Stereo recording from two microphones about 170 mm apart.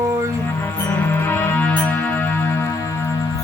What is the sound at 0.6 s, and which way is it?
Music, 10° left (ahead or behind).